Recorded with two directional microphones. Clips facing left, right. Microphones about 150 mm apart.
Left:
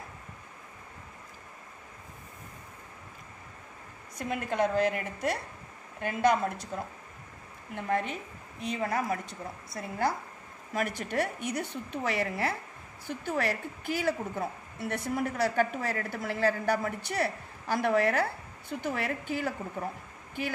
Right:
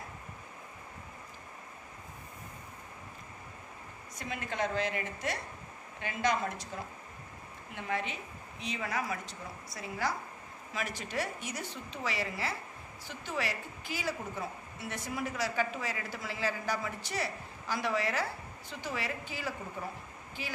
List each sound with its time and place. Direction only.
4.2 s a woman's voice: 55° left (ahead or behind)
7.7 s a woman's voice: 50° left (ahead or behind)